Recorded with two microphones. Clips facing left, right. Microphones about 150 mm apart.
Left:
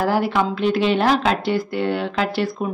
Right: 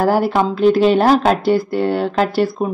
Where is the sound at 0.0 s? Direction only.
40° right (ahead or behind).